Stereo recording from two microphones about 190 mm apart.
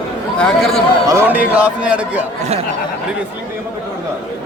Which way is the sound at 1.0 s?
10° right (ahead or behind).